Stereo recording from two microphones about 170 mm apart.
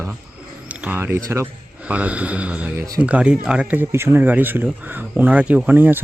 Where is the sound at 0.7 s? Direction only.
10° right (ahead or behind).